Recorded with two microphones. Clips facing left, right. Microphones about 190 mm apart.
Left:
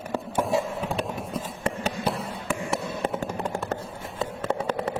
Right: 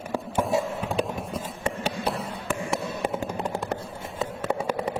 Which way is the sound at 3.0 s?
10° right (ahead or behind).